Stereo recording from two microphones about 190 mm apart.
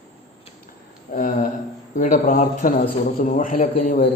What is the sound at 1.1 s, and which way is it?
A man's voice, 45° left (ahead or behind).